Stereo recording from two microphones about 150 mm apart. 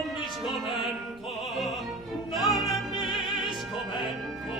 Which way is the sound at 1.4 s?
Centre (ahead or behind).